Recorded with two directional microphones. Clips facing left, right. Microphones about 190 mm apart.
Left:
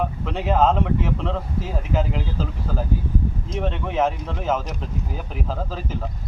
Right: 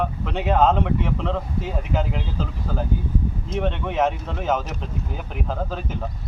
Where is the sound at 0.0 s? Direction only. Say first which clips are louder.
Even; centre (ahead or behind).